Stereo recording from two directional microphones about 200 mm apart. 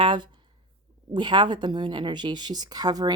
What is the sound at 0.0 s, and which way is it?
Speech, 25° right (ahead or behind).